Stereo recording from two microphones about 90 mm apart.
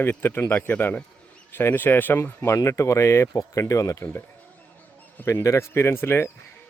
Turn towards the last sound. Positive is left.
turn(degrees=30)  # may be behind; listen again after turning